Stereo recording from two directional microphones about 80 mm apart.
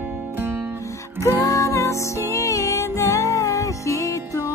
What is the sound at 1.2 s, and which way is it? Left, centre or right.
Music, left.